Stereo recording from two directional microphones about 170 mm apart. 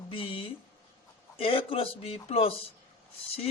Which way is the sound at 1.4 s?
30° left (ahead or behind).